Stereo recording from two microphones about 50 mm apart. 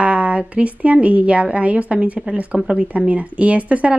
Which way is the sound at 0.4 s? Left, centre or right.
Right.